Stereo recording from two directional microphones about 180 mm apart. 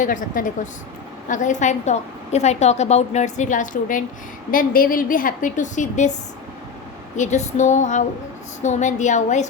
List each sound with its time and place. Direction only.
0.0 s a woman's voice: 45° left (ahead or behind)
7.2 s a woman's voice: 40° left (ahead or behind)